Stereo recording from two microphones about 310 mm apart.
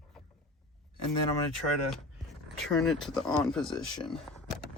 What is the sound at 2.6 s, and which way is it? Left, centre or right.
Speech, centre.